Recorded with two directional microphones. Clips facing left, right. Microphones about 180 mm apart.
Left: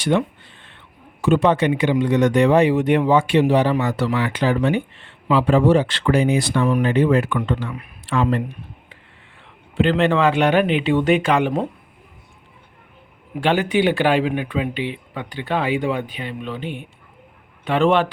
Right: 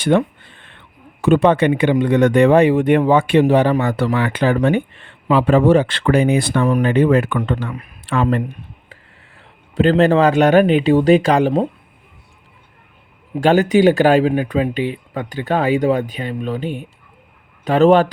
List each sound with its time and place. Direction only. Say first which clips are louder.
0.0 s a sound: right 4 dB; 55° right (ahead or behind)
1.2 s speech: right 3 dB; 55° right (ahead or behind)
9.7 s speech: right 4 dB; 40° right (ahead or behind)
13.4 s speech: right 6 dB; 40° right (ahead or behind)